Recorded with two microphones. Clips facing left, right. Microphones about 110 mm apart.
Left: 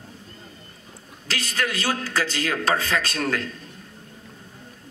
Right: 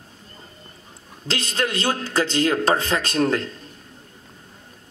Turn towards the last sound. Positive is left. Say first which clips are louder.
# right 4 dB
turn(degrees=-25)  # may be behind; listen again after turning